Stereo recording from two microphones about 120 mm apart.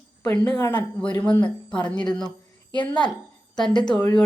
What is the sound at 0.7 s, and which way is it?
Speech, 10° left (ahead or behind).